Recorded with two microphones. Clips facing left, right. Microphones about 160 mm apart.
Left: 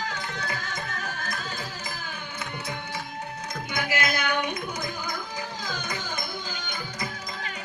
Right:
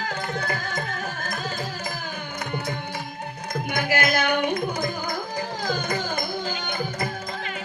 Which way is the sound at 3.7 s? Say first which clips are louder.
Right 4 dB; 55° right (ahead or behind).